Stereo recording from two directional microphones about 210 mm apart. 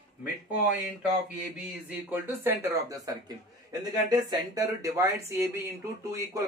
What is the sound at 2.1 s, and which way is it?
Speech, 10° right (ahead or behind).